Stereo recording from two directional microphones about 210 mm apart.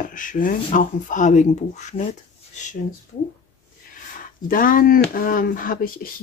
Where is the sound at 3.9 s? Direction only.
40° left (ahead or behind).